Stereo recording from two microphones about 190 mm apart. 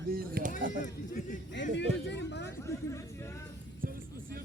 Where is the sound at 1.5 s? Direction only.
70° left (ahead or behind).